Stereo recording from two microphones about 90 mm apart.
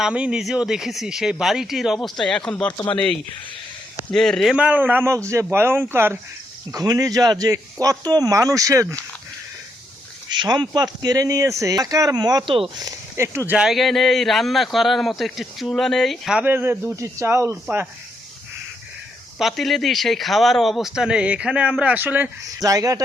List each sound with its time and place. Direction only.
0.0 s a man's voice: 10° right (ahead or behind); by 2.7 s 10° left (ahead or behind)
4.1 s a man's voice: 5° left (ahead or behind)
4.5 s a man's voice: 15° right (ahead or behind)
5.0 s speech: 35° right (ahead or behind)
6.7 s speech: 40° right (ahead or behind)
10.2 s speech: 55° right (ahead or behind)
11.0 s speech: 40° right (ahead or behind)
13.1 s speech: 30° right (ahead or behind)
13.6 s a man's voice: centre (ahead or behind)
16.3 s speech: 15° right (ahead or behind)
16.9 s speech: 35° right (ahead or behind)
19.4 s a man's voice: centre (ahead or behind); by 22.3 s 20° right (ahead or behind)
22.6 s speech: 40° right (ahead or behind)